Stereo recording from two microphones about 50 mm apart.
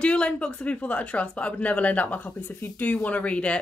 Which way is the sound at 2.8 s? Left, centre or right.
Left.